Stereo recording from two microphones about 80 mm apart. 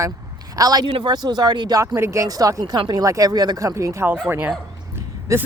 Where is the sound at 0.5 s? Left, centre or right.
Right.